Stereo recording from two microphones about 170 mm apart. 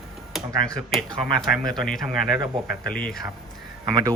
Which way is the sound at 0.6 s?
Centre (ahead or behind).